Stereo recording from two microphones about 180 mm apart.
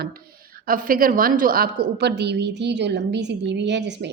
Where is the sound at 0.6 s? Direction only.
50° right (ahead or behind).